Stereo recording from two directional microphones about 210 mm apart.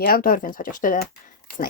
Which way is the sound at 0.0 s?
45° left (ahead or behind).